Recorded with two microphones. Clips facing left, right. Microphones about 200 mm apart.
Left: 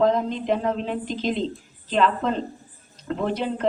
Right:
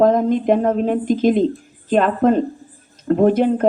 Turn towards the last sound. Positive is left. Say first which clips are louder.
# right 10 dB
turn(degrees=-50)  # may be behind; listen again after turning